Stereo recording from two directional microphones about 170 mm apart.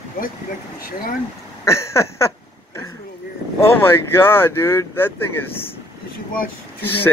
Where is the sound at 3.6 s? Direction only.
15° left (ahead or behind).